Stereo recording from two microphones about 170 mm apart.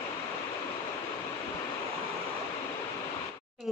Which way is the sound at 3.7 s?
Centre (ahead or behind).